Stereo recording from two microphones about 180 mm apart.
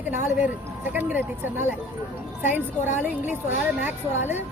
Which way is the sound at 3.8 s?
10° right (ahead or behind).